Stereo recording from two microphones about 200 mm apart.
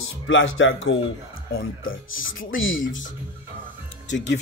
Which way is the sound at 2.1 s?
80° left.